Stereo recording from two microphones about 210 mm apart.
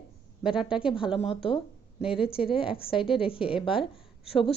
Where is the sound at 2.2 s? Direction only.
25° left (ahead or behind).